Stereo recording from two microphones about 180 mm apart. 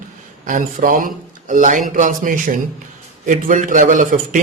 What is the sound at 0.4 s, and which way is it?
A man's voice, 45° right (ahead or behind).